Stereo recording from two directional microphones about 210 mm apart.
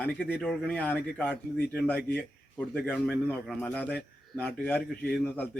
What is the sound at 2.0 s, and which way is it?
Speech, 50° left (ahead or behind).